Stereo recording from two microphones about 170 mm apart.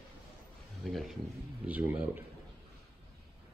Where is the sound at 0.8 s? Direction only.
Centre (ahead or behind).